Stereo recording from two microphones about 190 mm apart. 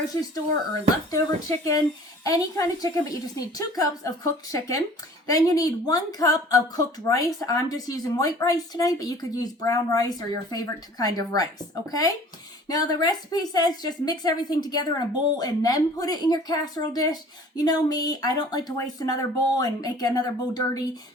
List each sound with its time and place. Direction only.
0.1 s speech: 20° left (ahead or behind)